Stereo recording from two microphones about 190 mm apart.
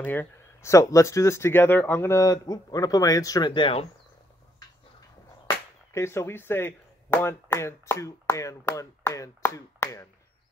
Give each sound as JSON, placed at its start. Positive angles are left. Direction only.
{"t": 0.0, "sound": "speech", "side_deg": 10}
{"t": 5.9, "sound": "speech", "side_deg": 15}